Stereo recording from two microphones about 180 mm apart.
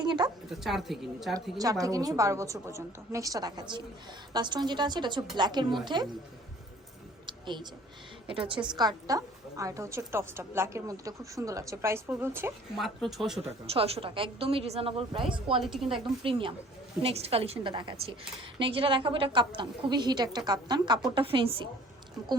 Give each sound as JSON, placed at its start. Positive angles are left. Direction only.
{"t": 0.0, "sound": "a woman's voice", "side_deg": -25}
{"t": 0.5, "sound": "a woman's voice", "side_deg": 0}
{"t": 1.8, "sound": "a woman's voice", "side_deg": -20}
{"t": 7.3, "sound": "a sound", "side_deg": -25}
{"t": 8.3, "sound": "a woman's voice", "side_deg": -30}
{"t": 12.7, "sound": "a woman's voice", "side_deg": 0}
{"t": 13.7, "sound": "a woman's voice", "side_deg": -30}
{"t": 15.6, "sound": "a woman's voice", "side_deg": 0}
{"t": 16.2, "sound": "a woman's voice", "side_deg": -30}